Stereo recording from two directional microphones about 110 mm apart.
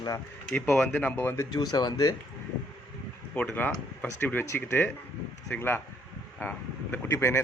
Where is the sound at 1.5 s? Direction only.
35° left (ahead or behind).